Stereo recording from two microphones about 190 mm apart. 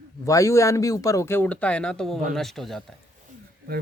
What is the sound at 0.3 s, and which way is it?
Speech, 15° left (ahead or behind).